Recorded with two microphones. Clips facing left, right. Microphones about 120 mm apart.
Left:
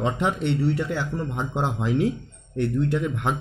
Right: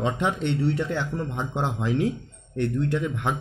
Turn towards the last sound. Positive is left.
turn(degrees=15)  # may be behind; listen again after turning